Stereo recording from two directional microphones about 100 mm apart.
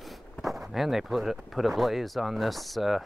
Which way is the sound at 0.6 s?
5° right (ahead or behind).